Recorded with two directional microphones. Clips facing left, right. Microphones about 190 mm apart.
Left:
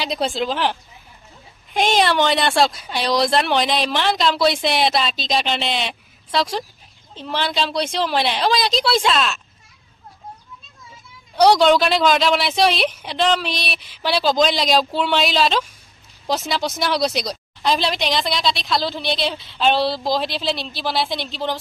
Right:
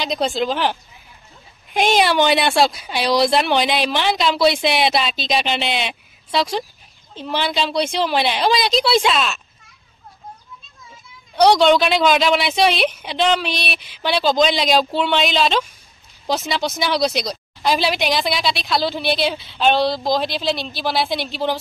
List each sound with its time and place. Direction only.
0.0 s a woman's voice: 5° left (ahead or behind)
11.3 s a woman's voice: 5° left (ahead or behind)